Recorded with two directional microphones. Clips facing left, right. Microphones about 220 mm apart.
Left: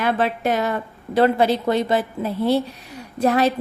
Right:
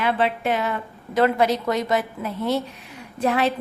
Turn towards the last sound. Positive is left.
turn(degrees=40)  # may be behind; listen again after turning